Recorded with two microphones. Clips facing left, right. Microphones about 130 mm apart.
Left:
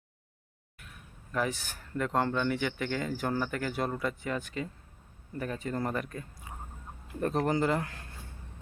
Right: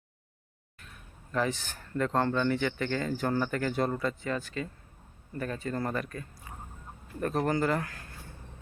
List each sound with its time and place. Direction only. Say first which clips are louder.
1.3 s a man's voice: right 2 dB; 10° left (ahead or behind)